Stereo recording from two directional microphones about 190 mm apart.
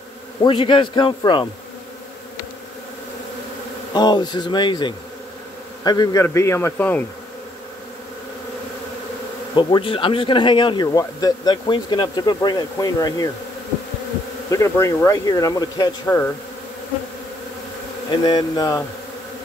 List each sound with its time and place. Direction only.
0.4 s speech: 25° left (ahead or behind)
3.9 s speech: 25° left (ahead or behind)
9.6 s speech: 25° left (ahead or behind)
14.5 s speech: 15° left (ahead or behind)
18.1 s speech: 25° left (ahead or behind)